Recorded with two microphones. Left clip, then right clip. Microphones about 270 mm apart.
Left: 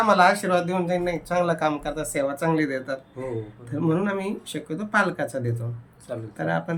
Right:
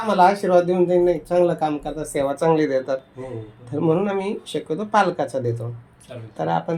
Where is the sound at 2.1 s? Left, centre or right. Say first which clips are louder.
Right 6 dB; centre.